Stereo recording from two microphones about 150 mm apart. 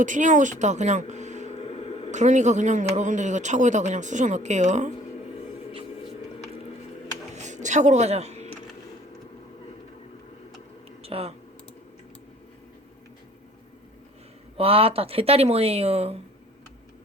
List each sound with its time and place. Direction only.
0.0 s speech: 55° right (ahead or behind)
1.5 s a sound: 45° left (ahead or behind)
2.0 s speech: 50° right (ahead or behind)
7.3 s a sound: 55° right (ahead or behind)
11.0 s speech: 40° right (ahead or behind)
14.6 s speech: 40° right (ahead or behind)